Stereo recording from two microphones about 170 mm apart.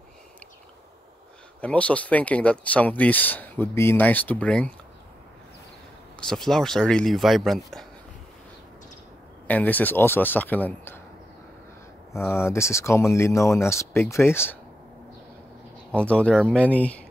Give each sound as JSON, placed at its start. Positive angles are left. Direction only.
{"t": 1.6, "sound": "speech", "side_deg": 5}
{"t": 6.1, "sound": "speech", "side_deg": 5}
{"t": 9.5, "sound": "speech", "side_deg": 10}
{"t": 12.1, "sound": "speech", "side_deg": 15}
{"t": 15.9, "sound": "speech", "side_deg": 5}